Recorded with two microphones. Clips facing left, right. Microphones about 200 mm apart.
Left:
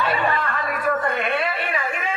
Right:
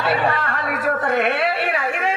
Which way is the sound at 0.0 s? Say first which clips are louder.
Right 2 dB; 70° right (ahead or behind).